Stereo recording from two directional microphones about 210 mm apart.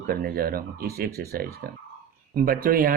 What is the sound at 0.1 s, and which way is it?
Speech, 45° right (ahead or behind).